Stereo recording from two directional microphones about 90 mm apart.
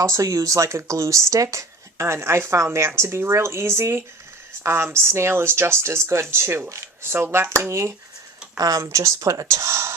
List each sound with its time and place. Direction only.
0.0 s speech: 35° right (ahead or behind)